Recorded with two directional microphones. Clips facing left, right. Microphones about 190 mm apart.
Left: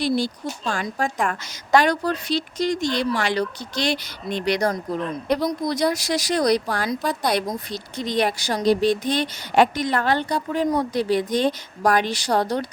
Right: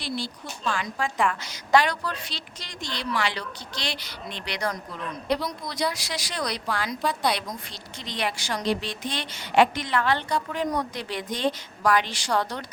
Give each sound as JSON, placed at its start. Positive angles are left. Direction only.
{"t": 0.0, "sound": "a woman's voice", "side_deg": 45}